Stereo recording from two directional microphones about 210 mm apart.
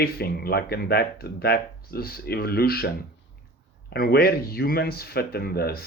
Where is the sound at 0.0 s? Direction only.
50° left (ahead or behind).